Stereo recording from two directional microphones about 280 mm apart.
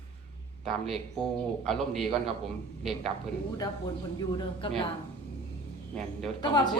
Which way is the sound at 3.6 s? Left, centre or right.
Centre.